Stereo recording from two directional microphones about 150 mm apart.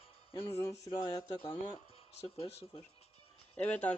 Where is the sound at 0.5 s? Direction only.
20° left (ahead or behind).